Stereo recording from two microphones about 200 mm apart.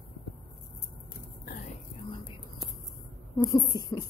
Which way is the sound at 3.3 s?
20° left (ahead or behind).